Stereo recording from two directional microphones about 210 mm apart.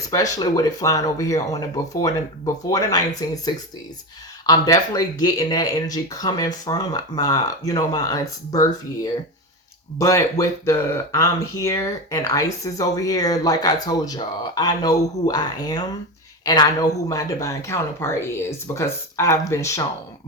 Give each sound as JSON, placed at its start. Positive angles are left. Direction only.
{"t": 0.1, "sound": "speech", "side_deg": 15}
{"t": 10.0, "sound": "speech", "side_deg": 15}